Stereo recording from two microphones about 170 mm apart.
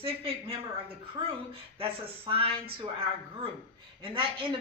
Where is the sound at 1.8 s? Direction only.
35° right (ahead or behind).